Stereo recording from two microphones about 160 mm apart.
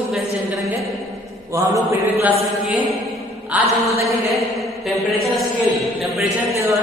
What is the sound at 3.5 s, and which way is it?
Chant, 10° right (ahead or behind).